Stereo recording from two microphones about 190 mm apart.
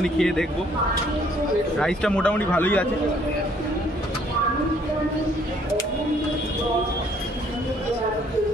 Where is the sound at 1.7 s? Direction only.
5° left (ahead or behind).